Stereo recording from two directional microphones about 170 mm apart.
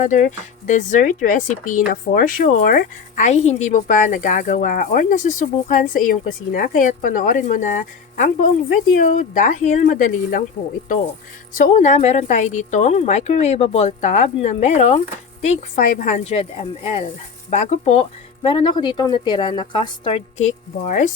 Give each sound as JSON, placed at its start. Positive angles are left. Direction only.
{"t": 0.0, "sound": "speech", "side_deg": 45}
{"t": 11.5, "sound": "speech", "side_deg": 45}
{"t": 18.4, "sound": "a woman's voice", "side_deg": 30}
{"t": 20.8, "sound": "speech", "side_deg": 50}